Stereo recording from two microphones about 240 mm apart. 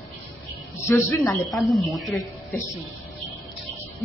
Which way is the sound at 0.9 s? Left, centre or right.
Centre.